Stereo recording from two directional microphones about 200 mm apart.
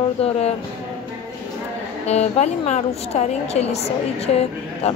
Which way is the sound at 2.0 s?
30° left (ahead or behind).